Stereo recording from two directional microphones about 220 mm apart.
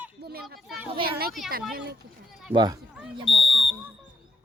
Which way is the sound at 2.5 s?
20° right (ahead or behind).